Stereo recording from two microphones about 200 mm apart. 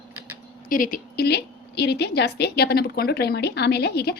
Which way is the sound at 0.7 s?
45° left (ahead or behind).